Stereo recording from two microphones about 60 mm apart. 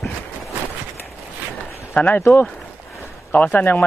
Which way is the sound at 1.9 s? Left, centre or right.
Left.